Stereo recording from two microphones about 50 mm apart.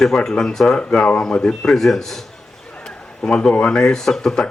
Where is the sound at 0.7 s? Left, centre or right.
Left.